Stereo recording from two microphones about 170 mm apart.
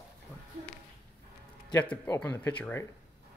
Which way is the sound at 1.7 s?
10° left (ahead or behind).